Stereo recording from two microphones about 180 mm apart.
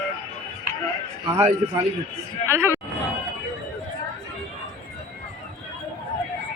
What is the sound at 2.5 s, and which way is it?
Speech, 15° right (ahead or behind).